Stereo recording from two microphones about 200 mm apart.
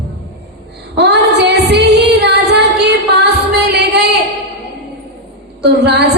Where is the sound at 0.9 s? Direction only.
60° right (ahead or behind).